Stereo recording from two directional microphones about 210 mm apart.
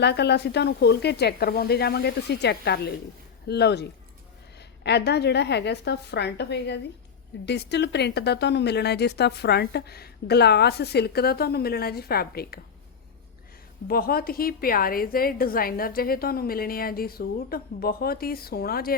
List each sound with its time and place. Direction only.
0.0 s a woman's voice: 55° left (ahead or behind)
13.8 s a woman's voice: 45° left (ahead or behind)